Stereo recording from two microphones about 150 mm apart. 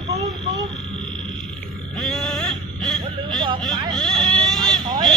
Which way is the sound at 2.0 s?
Centre (ahead or behind).